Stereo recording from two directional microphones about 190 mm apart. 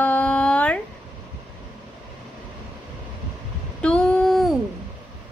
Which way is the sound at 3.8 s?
5° left (ahead or behind).